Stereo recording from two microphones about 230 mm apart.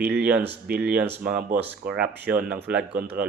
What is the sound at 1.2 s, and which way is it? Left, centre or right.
Speech, right.